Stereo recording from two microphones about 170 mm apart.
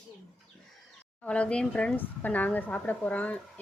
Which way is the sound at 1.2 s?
5° left (ahead or behind).